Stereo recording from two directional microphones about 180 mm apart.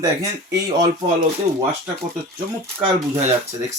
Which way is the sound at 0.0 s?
20° right (ahead or behind).